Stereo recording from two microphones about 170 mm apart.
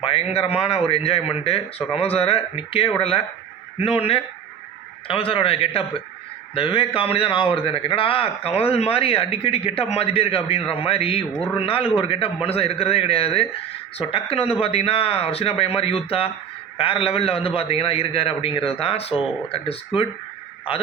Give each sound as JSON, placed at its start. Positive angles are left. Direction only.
{"t": 0.0, "sound": "a man's voice", "side_deg": 35}